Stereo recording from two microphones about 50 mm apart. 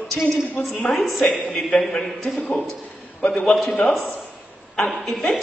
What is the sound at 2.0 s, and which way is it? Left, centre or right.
Speech, centre.